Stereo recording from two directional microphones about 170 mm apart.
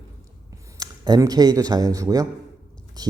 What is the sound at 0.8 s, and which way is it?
Speech, 20° right (ahead or behind).